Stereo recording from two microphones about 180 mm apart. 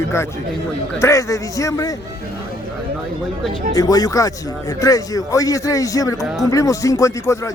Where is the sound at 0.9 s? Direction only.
15° left (ahead or behind).